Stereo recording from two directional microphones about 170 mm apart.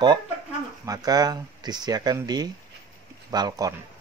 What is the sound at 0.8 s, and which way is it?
Speech, 20° right (ahead or behind).